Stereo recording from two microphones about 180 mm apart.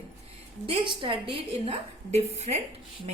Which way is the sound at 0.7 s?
30° right (ahead or behind).